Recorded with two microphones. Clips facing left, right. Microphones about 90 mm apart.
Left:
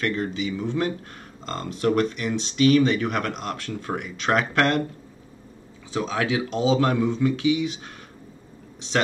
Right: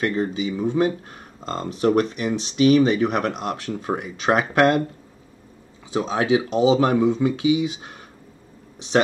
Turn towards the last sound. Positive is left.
turn(degrees=-15)  # may be behind; listen again after turning